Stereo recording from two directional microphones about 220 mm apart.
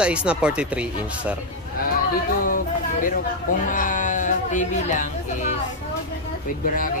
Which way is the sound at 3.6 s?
35° left (ahead or behind).